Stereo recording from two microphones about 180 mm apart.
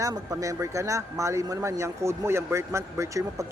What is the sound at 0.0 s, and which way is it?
Speech, 20° right (ahead or behind).